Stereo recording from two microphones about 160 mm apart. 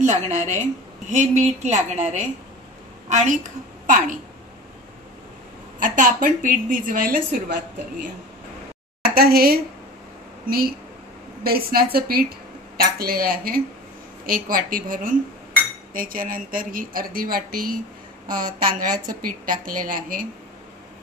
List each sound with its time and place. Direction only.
0.0 s a woman's voice: 45° right (ahead or behind)
5.8 s a woman's voice: 55° right (ahead or behind)
9.0 s a woman's voice: 70° right (ahead or behind)